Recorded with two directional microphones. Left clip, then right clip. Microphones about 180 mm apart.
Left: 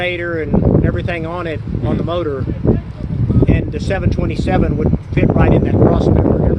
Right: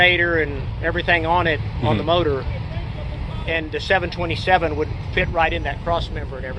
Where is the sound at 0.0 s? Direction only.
65° left (ahead or behind).